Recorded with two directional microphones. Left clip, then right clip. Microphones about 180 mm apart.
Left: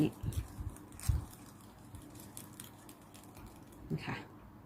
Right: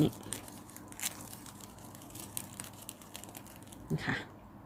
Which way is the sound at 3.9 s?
15° right (ahead or behind).